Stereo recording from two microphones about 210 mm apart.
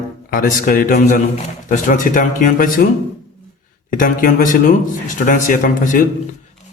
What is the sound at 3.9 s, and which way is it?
Speech, 40° left (ahead or behind).